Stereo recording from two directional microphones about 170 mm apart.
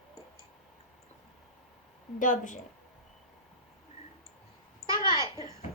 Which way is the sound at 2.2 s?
50° left (ahead or behind).